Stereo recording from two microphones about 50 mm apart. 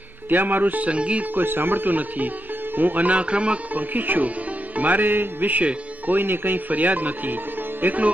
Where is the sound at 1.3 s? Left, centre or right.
Right.